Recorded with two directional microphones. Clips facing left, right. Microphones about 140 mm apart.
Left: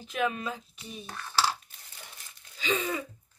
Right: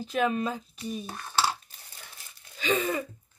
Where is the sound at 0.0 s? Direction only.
35° right (ahead or behind).